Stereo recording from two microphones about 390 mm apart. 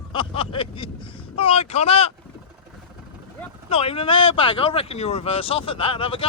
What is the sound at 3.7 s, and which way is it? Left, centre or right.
Speech, centre.